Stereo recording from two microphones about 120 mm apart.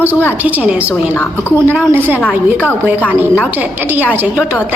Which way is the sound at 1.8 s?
20° right (ahead or behind).